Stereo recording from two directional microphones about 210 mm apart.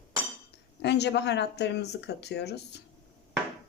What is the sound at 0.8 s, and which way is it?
Speech, 55° left (ahead or behind).